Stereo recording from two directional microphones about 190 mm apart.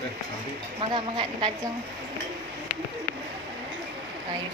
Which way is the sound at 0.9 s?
25° right (ahead or behind).